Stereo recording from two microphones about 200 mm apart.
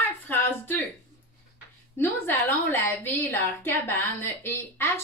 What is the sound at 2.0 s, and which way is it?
A woman's voice, 10° left (ahead or behind).